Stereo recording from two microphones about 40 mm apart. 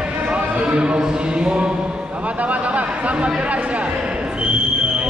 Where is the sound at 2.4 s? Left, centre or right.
Right.